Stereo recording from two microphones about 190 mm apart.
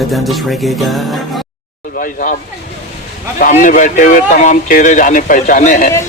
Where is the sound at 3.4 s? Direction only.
45° left (ahead or behind).